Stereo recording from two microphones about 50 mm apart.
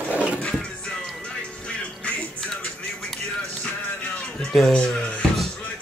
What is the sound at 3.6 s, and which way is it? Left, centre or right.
Music, centre.